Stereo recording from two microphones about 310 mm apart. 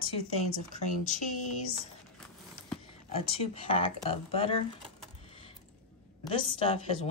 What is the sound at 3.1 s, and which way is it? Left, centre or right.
A woman's voice, centre.